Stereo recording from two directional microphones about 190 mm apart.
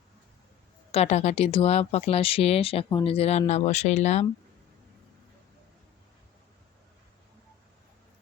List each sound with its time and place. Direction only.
0.9 s speech: 35° left (ahead or behind)